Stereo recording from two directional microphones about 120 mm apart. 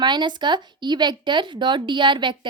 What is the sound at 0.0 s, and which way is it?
Speech, 40° right (ahead or behind).